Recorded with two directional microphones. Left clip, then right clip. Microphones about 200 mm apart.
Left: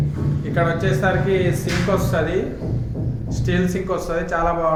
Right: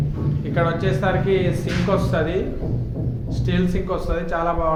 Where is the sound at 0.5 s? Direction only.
5° left (ahead or behind).